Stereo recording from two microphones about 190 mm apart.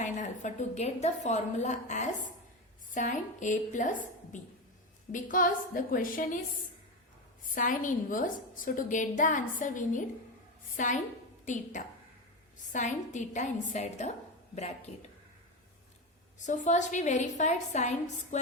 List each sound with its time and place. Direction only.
0.0 s a woman's voice: 40° left (ahead or behind)
7.5 s a woman's voice: 45° left (ahead or behind)
16.4 s a woman's voice: 40° left (ahead or behind)